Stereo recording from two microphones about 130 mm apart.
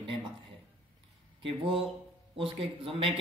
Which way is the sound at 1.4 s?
45° right (ahead or behind).